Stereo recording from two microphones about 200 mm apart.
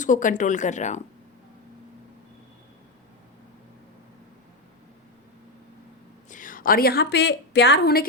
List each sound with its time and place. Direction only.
0.0 s speech: 40° left (ahead or behind)
6.3 s a woman's voice: 40° left (ahead or behind)